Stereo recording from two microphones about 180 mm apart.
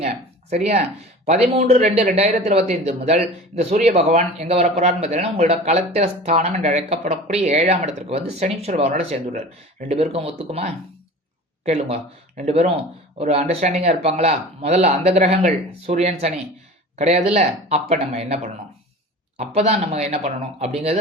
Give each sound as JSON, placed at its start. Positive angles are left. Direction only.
{"t": 0.5, "sound": "speech", "side_deg": -40}
{"t": 9.9, "sound": "speech", "side_deg": -35}